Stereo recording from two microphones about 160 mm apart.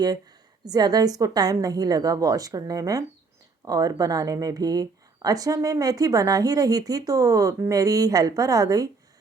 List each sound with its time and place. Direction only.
0.6 s speech: 25° right (ahead or behind)